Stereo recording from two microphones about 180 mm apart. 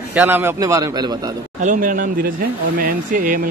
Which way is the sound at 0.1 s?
10° right (ahead or behind).